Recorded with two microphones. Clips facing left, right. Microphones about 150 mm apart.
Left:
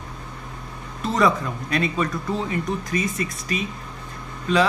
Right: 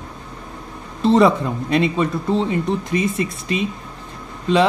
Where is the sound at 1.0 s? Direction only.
30° right (ahead or behind).